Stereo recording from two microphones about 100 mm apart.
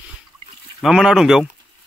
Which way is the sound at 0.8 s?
5° right (ahead or behind).